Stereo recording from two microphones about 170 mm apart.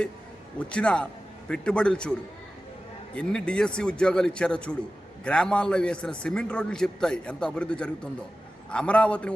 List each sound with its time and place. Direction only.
0.6 s a man's voice: 5° left (ahead or behind)
3.2 s a man's voice: 5° left (ahead or behind)